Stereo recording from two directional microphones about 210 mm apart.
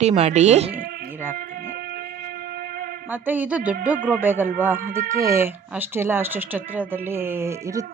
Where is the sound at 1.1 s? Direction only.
10° right (ahead or behind).